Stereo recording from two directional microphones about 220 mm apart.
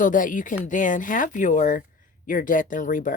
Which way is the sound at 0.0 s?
35° left (ahead or behind).